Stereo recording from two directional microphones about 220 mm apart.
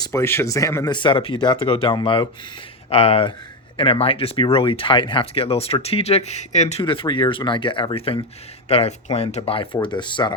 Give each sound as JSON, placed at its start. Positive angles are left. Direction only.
{"t": 0.1, "sound": "speech", "side_deg": 10}